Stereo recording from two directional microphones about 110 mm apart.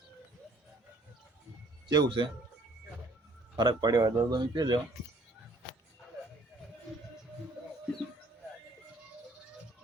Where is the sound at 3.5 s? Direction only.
40° right (ahead or behind).